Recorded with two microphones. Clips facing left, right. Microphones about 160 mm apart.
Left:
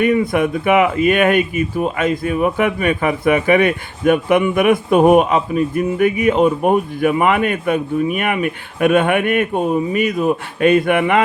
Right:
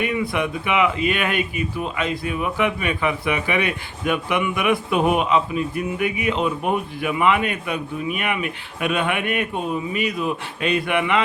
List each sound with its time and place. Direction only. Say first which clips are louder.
0.0 s speech: left 8 dB; 45° left (ahead or behind)